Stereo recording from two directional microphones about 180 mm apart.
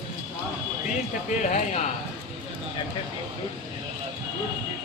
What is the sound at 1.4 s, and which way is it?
Speech, 45° left (ahead or behind).